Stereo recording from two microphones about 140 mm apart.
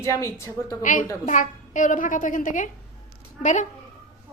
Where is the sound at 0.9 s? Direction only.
65° left (ahead or behind).